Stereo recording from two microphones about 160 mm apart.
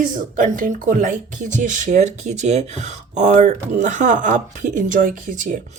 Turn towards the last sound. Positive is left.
turn(degrees=-55)  # may be behind; listen again after turning